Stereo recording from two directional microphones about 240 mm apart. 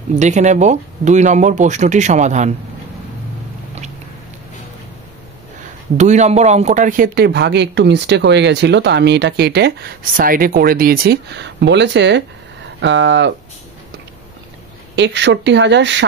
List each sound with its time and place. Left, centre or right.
0.1 s speech: right
5.9 s speech: right
15.0 s speech: right